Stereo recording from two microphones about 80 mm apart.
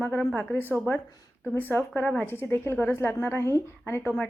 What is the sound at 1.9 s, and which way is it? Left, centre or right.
Speech, centre.